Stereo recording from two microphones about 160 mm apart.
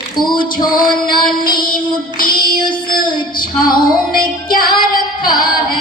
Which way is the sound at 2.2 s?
30° left (ahead or behind).